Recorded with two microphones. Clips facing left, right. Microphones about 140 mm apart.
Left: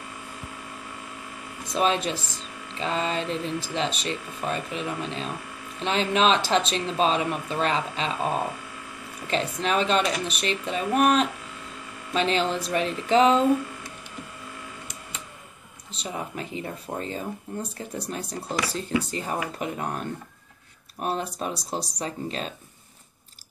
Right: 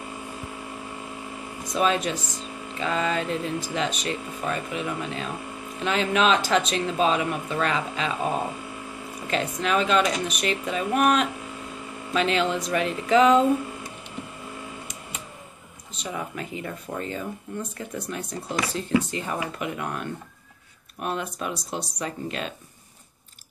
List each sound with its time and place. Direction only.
1.7 s speech: 30° left (ahead or behind)
9.3 s speech: 30° left (ahead or behind)
15.9 s speech: 30° left (ahead or behind)